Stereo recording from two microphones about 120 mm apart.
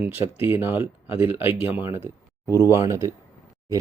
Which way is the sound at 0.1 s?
20° right (ahead or behind).